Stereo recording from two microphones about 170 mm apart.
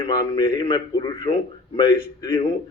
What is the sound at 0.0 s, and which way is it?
A man's voice, 25° left (ahead or behind).